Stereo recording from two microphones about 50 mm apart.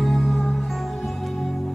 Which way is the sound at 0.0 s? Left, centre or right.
Centre.